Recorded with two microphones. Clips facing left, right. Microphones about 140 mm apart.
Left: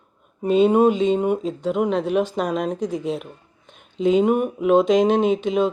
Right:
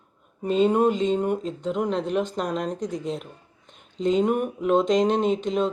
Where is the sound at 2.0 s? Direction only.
65° left (ahead or behind).